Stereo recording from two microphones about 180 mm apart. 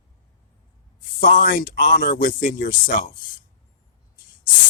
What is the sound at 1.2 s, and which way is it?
Speech, 50° left (ahead or behind).